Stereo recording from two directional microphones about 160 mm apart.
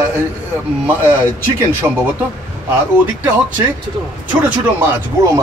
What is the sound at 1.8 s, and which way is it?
Speech, 15° right (ahead or behind).